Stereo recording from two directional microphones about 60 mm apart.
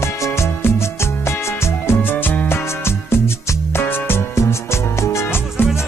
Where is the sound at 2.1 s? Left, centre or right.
Left.